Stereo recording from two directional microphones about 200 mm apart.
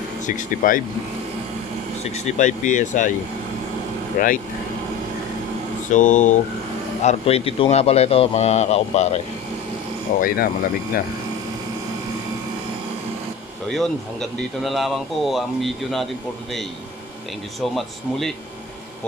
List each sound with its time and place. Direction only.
0.3 s speech: 40° left (ahead or behind)
2.1 s speech: 35° left (ahead or behind)
4.2 s speech: 45° left (ahead or behind)
5.9 s speech: 40° left (ahead or behind)
10.2 s speech: 45° left (ahead or behind)
13.7 s speech: centre (ahead or behind)
17.6 s speech: centre (ahead or behind)